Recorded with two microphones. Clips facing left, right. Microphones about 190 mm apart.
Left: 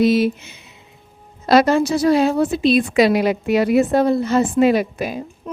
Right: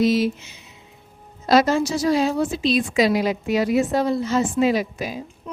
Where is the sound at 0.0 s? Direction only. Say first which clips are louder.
Left 3 dB; 60° left (ahead or behind).